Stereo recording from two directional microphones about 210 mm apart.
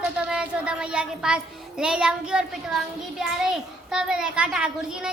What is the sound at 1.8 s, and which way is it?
A child's voice, 5° right (ahead or behind).